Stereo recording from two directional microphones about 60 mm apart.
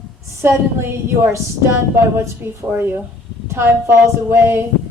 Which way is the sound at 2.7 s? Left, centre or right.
Right.